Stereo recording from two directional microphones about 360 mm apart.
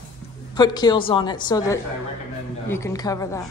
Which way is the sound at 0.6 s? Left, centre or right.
Centre.